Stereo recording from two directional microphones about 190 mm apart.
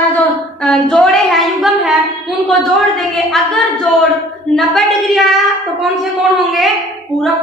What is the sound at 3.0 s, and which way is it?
A woman's voice, centre (ahead or behind).